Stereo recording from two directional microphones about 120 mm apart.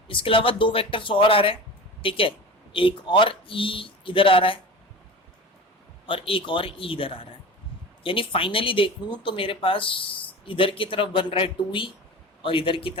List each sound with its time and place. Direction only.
0.1 s speech: 45° left (ahead or behind)
6.1 s speech: 50° left (ahead or behind)